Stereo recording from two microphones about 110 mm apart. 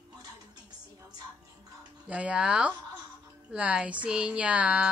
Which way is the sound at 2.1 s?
10° right (ahead or behind).